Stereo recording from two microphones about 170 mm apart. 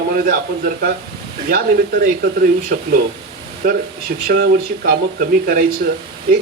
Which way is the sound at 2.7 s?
60° right (ahead or behind).